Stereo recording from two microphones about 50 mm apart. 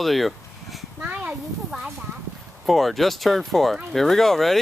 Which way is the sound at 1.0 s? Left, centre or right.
Right.